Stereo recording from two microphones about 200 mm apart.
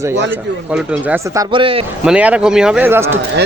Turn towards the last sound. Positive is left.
turn(degrees=-10)  # may be behind; listen again after turning